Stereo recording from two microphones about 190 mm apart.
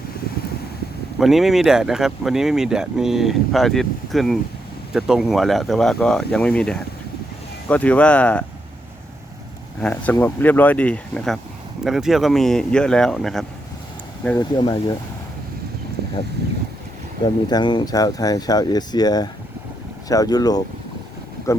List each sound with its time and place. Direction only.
1.2 s speech: centre (ahead or behind)
9.8 s speech: 10° left (ahead or behind)
14.6 s speech: 25° left (ahead or behind)
17.2 s speech: 25° left (ahead or behind)